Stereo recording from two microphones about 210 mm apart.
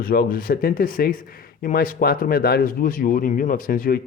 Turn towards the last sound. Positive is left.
turn(degrees=45)  # may be behind; listen again after turning